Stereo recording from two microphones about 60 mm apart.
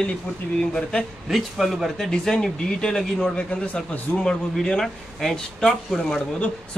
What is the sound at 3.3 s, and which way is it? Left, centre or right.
Speech, centre.